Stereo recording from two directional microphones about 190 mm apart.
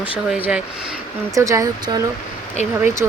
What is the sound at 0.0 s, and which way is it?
Speech, 5° right (ahead or behind).